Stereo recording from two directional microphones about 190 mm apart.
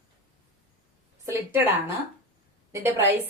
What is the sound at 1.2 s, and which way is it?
Speech, 10° right (ahead or behind).